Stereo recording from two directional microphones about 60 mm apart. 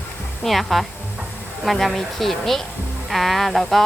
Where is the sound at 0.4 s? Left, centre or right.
Centre.